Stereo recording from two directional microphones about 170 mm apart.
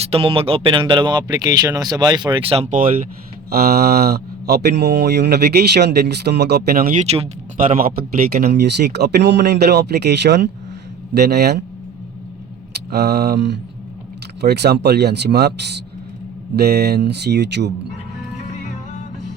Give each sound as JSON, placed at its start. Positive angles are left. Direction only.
{"t": 0.0, "sound": "speech", "side_deg": -35}
{"t": 3.5, "sound": "speech", "side_deg": -65}
{"t": 7.0, "sound": "speech", "side_deg": -40}
{"t": 7.8, "sound": "speech", "side_deg": -55}
{"t": 11.1, "sound": "speech", "side_deg": -70}
{"t": 12.9, "sound": "speech", "side_deg": -65}
{"t": 16.6, "sound": "speech", "side_deg": -65}